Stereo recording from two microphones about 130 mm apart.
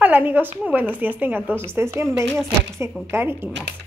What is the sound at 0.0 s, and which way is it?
A woman's voice, 15° right (ahead or behind).